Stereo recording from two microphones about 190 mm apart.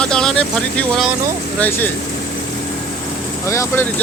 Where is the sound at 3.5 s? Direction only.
15° left (ahead or behind).